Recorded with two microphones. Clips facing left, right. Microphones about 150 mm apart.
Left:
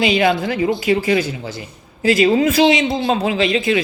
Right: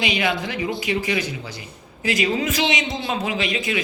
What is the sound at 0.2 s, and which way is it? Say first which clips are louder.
A man's voice: left 7 dB; 35° left (ahead or behind).